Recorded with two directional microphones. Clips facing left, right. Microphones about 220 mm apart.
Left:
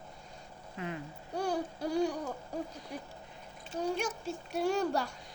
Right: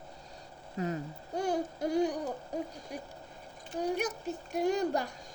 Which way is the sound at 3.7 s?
15° right (ahead or behind).